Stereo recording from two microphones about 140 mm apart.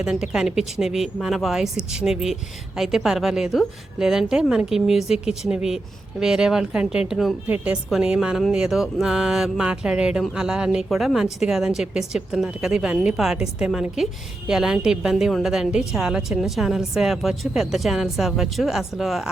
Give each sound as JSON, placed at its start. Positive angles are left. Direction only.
{"t": 0.0, "sound": "a woman's voice", "side_deg": -5}